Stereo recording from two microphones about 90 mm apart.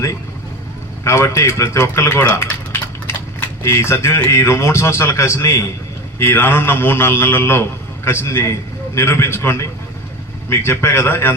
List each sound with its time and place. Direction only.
1.0 s a man's voice: 30° left (ahead or behind)
3.1 s a sound: 30° left (ahead or behind)
3.6 s a man's voice: 30° left (ahead or behind)